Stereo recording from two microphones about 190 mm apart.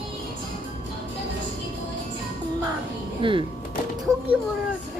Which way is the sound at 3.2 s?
25° right (ahead or behind).